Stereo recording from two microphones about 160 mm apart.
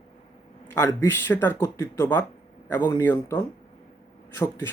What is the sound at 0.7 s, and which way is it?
Speech, 15° left (ahead or behind).